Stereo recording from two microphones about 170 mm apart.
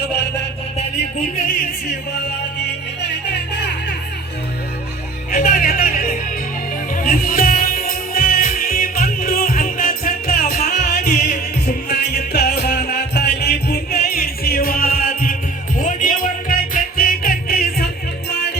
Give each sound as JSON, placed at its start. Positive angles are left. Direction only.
{"t": 0.0, "sound": "a sound", "side_deg": 85}
{"t": 5.3, "sound": "music", "side_deg": 55}
{"t": 11.6, "sound": "music", "side_deg": 70}